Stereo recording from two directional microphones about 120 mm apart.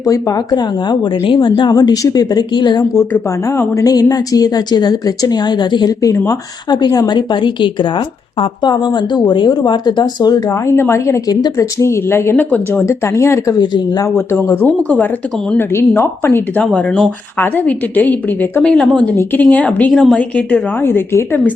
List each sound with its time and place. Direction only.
0.0 s a woman's voice: 30° left (ahead or behind)
3.6 s a woman's voice: 30° left (ahead or behind)
10.8 s a woman's voice: 20° left (ahead or behind)
13.6 s a woman's voice: 35° left (ahead or behind)
14.3 s speech: 15° left (ahead or behind)
19.9 s speech: centre (ahead or behind); by 21.2 s 20° left (ahead or behind)